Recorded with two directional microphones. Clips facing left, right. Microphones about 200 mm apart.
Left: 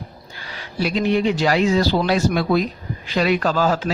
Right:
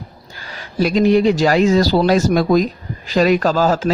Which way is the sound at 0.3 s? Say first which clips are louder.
Right 6 dB; 45° right (ahead or behind).